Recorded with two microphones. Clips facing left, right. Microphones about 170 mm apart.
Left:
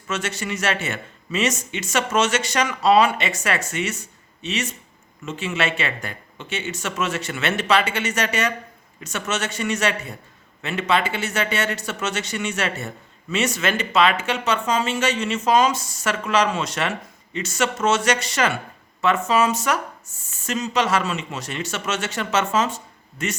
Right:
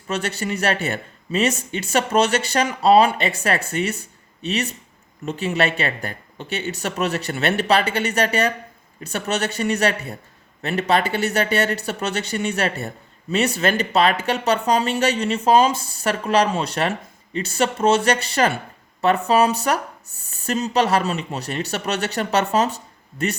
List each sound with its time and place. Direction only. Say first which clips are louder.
0.1 s speech: right 2 dB; 35° right (ahead or behind)
5.2 s speech: right 3 dB; 35° right (ahead or behind)
20.1 s speech: even; 65° right (ahead or behind)
20.3 s speech: right 3 dB; 35° right (ahead or behind)